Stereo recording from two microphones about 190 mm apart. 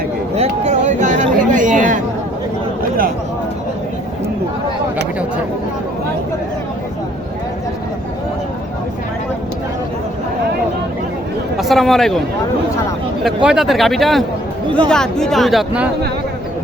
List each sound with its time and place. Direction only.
0.3 s a sound: 35° right (ahead or behind)
11.5 s speech: centre (ahead or behind)
13.2 s speech: 5° right (ahead or behind)